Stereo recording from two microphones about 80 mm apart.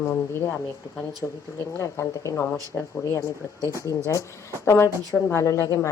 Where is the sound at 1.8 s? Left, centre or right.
Left.